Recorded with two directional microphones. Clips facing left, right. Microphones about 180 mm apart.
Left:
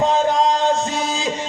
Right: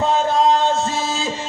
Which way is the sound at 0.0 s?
15° left (ahead or behind).